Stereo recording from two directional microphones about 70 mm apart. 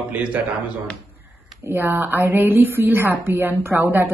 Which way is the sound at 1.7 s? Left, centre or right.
Right.